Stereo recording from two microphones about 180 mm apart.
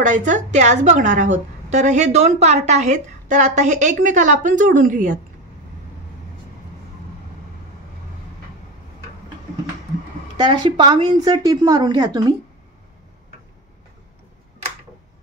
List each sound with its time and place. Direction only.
0.0 s a woman's voice: 45° right (ahead or behind)
10.3 s a woman's voice: 25° right (ahead or behind)